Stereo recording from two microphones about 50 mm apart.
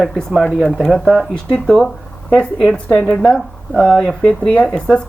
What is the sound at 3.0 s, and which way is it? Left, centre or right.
Speech, centre.